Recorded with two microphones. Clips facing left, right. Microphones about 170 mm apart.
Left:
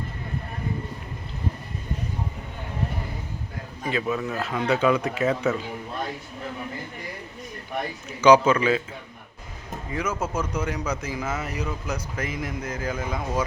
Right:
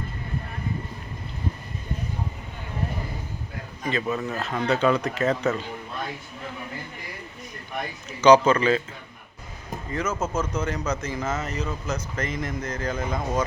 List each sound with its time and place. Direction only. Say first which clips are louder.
3.8 s speech: even; 10° left (ahead or behind)
8.2 s speech: even; 10° left (ahead or behind)
9.9 s speech: right 1 dB; 10° left (ahead or behind)